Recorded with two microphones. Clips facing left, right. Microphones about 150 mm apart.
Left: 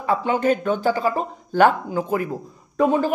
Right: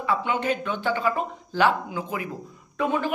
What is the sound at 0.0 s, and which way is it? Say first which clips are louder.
Speech: left 5 dB; 40° left (ahead or behind).